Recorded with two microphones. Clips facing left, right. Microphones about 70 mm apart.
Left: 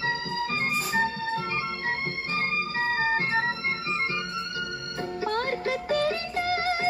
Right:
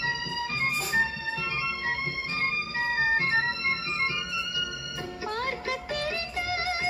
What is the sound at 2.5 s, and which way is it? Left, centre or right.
Music, left.